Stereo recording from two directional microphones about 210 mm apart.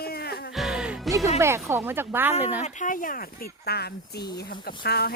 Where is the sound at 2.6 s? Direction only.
35° left (ahead or behind).